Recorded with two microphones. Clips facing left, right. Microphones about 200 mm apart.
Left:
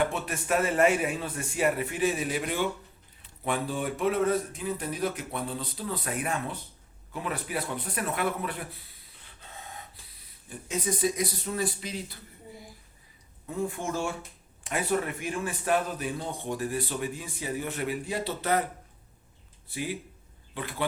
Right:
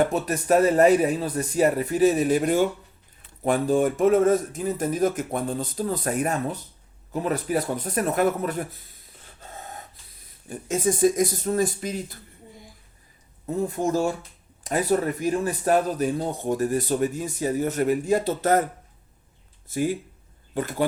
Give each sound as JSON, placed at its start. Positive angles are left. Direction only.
{"t": 0.0, "sound": "a man's voice", "side_deg": -40}
{"t": 13.5, "sound": "a man's voice", "side_deg": -40}
{"t": 19.6, "sound": "speech", "side_deg": -45}